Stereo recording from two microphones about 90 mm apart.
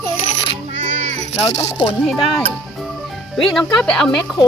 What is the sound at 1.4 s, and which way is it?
Speech, 35° left (ahead or behind).